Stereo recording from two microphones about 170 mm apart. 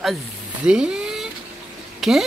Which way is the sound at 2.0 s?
Centre (ahead or behind).